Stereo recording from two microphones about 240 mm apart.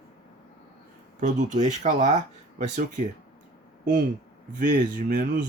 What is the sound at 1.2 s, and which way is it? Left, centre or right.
Speech, right.